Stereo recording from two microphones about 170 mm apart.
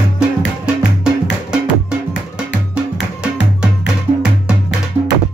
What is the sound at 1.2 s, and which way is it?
Music, 90° left.